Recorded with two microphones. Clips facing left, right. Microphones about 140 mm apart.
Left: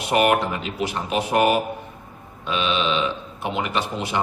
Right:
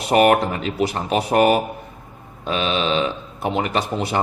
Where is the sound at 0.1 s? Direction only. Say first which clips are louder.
Right 4 dB; 40° right (ahead or behind).